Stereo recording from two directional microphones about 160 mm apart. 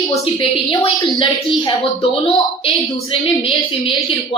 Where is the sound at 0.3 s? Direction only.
35° left (ahead or behind).